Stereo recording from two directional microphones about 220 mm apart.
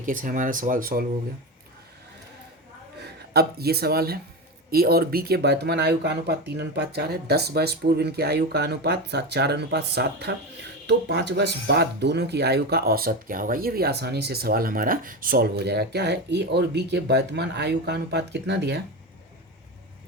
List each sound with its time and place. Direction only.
0.0 s speech: 35° right (ahead or behind)
3.0 s speech: 45° right (ahead or behind)